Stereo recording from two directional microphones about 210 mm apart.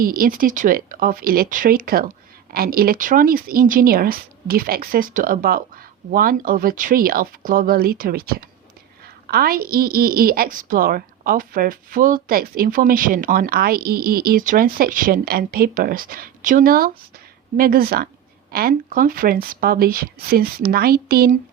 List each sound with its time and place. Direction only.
0.0 s a woman's voice: 45° right (ahead or behind)